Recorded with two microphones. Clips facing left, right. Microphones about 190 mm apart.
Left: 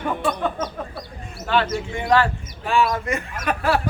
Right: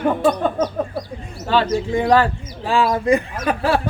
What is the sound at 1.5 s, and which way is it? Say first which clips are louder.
Speech: right 4 dB; 35° right (ahead or behind).